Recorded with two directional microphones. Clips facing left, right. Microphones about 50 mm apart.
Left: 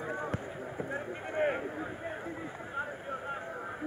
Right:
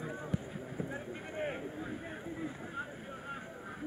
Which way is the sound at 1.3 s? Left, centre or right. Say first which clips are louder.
Left 8 dB; left.